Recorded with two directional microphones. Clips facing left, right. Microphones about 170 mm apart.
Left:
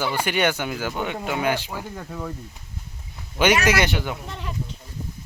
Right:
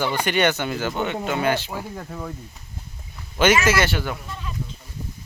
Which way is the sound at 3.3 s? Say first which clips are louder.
Right 1 dB; 10° left (ahead or behind).